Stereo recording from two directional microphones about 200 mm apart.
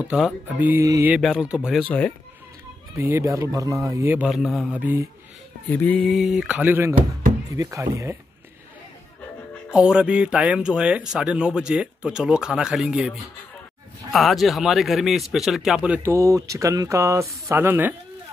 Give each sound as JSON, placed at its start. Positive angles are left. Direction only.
{"t": 0.0, "sound": "speech", "side_deg": -5}
{"t": 3.0, "sound": "speech", "side_deg": -15}
{"t": 5.7, "sound": "speech", "side_deg": 10}
{"t": 9.7, "sound": "speech", "side_deg": -5}